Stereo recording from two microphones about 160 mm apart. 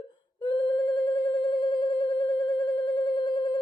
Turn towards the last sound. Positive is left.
turn(degrees=30)  # may be behind; listen again after turning